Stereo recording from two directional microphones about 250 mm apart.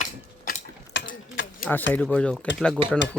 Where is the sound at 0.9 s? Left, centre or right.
Left.